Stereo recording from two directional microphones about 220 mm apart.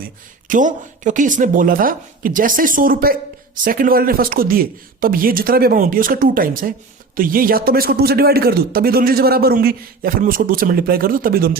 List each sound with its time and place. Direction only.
0.0 s a man's voice: 35° right (ahead or behind)